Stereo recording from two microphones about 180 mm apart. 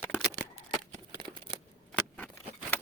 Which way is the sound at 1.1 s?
30° right (ahead or behind).